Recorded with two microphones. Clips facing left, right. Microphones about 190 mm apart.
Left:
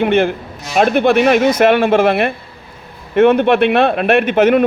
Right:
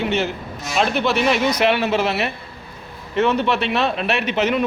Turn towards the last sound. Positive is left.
turn(degrees=55)  # may be behind; listen again after turning